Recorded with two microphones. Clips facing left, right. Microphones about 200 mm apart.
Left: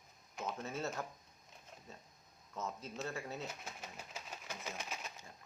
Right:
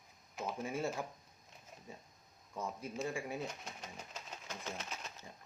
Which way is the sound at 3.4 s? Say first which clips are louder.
Right 2 dB; 5° left (ahead or behind).